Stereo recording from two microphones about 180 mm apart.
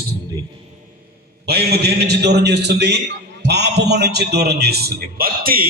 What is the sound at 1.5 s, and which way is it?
A man's voice, 60° right (ahead or behind).